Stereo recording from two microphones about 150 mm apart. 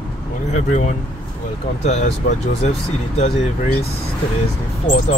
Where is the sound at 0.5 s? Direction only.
55° left (ahead or behind).